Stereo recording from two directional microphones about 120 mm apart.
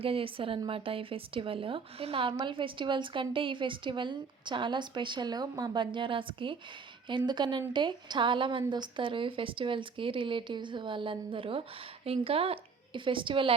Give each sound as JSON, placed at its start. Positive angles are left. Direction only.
{"t": 0.0, "sound": "a woman's voice", "side_deg": -50}